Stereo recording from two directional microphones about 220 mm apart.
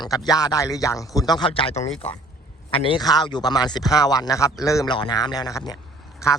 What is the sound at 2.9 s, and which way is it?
Speech, 20° left (ahead or behind).